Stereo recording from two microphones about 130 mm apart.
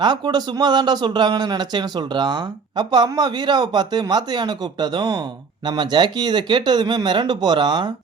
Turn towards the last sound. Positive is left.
turn(degrees=-35)  # may be behind; listen again after turning